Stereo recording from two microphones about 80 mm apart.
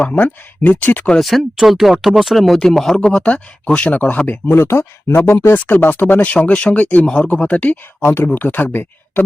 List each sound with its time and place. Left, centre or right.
0.1 s speech: centre
1.2 s speech: centre; by 5.5 s left
5.5 s speech: left
8.0 s speech: left